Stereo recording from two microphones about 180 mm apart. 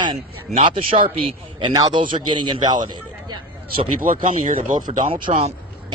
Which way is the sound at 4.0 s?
50° right (ahead or behind).